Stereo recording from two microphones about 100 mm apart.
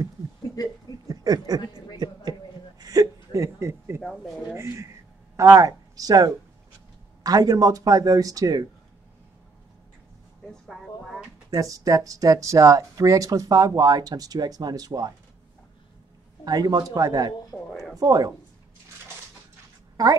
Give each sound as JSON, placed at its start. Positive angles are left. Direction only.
{"t": 1.0, "sound": "a sound", "side_deg": -40}
{"t": 2.8, "sound": "whimper", "side_deg": -35}
{"t": 4.0, "sound": "a sound", "side_deg": 0}
{"t": 4.6, "sound": "a sound", "side_deg": -25}
{"t": 5.3, "sound": "speech", "side_deg": -35}
{"t": 11.5, "sound": "speech", "side_deg": -35}
{"t": 16.4, "sound": "speech", "side_deg": -40}
{"t": 17.6, "sound": "speech", "side_deg": 5}
{"t": 17.9, "sound": "speech", "side_deg": -40}